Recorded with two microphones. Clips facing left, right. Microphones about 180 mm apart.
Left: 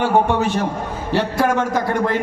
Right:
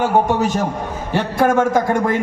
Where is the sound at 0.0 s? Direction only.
40° right (ahead or behind).